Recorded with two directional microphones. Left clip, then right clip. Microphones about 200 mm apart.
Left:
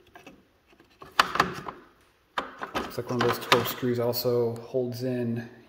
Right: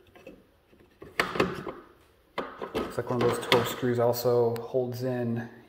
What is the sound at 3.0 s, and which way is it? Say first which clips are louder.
Speech: even; 25° left (ahead or behind).